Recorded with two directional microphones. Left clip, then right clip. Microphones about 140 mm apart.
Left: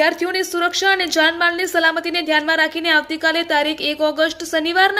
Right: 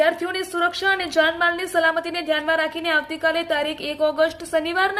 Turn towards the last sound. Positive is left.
turn(degrees=20)  # may be behind; listen again after turning